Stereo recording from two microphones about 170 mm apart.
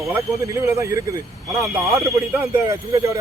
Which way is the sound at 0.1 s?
15° right (ahead or behind).